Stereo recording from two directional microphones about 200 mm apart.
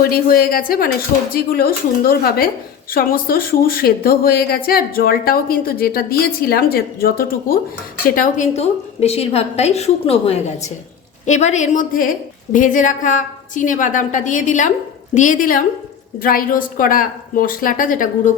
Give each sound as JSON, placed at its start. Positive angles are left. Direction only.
{"t": 0.0, "sound": "a woman's voice", "side_deg": 50}